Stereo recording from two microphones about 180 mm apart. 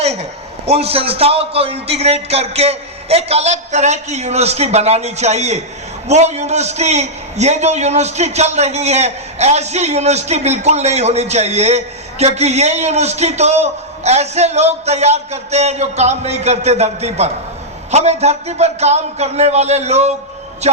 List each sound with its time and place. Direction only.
0.6 s a man's voice: 35° right (ahead or behind)